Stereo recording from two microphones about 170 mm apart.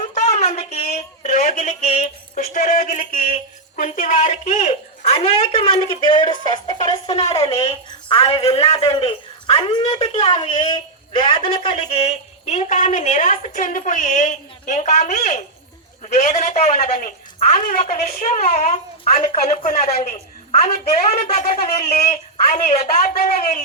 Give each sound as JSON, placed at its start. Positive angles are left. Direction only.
{"t": 0.1, "sound": "a sound", "side_deg": 40}
{"t": 2.3, "sound": "speech", "side_deg": 55}
{"t": 7.2, "sound": "speech", "side_deg": 40}
{"t": 9.8, "sound": "speech", "side_deg": 40}
{"t": 10.3, "sound": "speech", "side_deg": 25}
{"t": 16.7, "sound": "a woman's voice", "side_deg": 55}
{"t": 19.3, "sound": "speech", "side_deg": 40}
{"t": 20.0, "sound": "a sound", "side_deg": 40}
{"t": 21.0, "sound": "speech", "side_deg": 40}